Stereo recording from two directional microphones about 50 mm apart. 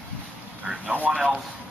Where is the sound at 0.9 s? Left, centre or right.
Left.